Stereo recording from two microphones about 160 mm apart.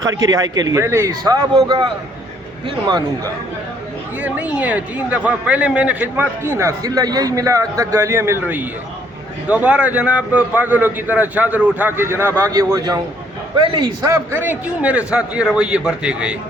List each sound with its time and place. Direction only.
0.0 s a man's voice: 20° right (ahead or behind)
4.2 s a man's voice: 10° right (ahead or behind)